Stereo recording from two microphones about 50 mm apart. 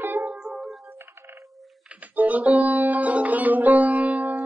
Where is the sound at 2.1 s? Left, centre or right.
Right.